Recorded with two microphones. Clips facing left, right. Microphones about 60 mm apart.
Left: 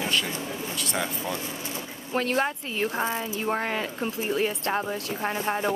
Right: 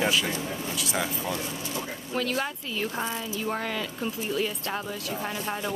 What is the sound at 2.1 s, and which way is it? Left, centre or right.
A woman's voice, left.